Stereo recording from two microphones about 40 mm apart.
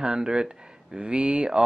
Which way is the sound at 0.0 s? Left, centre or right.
Centre.